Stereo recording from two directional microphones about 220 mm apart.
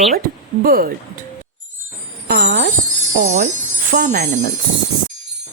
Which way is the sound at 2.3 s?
40° right (ahead or behind).